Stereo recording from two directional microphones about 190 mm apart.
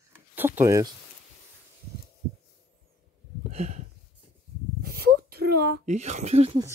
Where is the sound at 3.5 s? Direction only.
35° right (ahead or behind).